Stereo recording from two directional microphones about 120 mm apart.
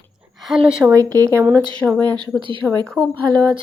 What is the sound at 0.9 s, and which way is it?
Speech, 25° right (ahead or behind).